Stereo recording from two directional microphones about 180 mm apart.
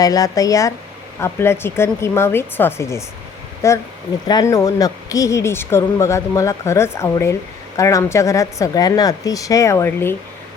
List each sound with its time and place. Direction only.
0.0 s speech: 20° left (ahead or behind)